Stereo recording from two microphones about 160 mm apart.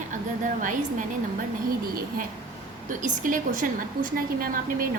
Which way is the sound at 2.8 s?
55° right (ahead or behind).